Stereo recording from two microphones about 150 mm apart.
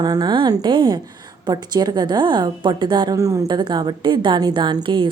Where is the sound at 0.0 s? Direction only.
25° right (ahead or behind).